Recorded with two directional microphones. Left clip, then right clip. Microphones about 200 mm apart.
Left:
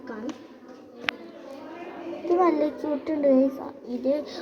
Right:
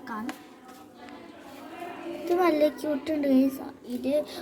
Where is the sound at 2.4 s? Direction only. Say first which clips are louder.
Even; 40° right (ahead or behind).